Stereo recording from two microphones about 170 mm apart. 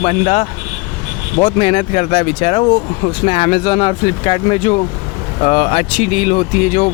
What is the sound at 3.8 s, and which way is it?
Speech, 30° left (ahead or behind).